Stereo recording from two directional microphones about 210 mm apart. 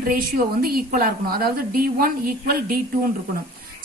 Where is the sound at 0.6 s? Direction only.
45° right (ahead or behind).